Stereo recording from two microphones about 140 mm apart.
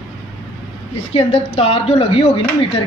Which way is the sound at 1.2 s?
45° left (ahead or behind).